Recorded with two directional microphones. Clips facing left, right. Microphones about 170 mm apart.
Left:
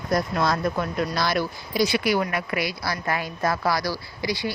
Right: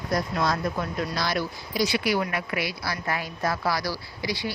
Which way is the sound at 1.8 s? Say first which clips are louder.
Left 3 dB; 50° left (ahead or behind).